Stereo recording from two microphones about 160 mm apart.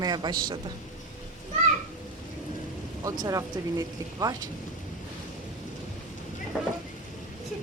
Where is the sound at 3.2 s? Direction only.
20° right (ahead or behind).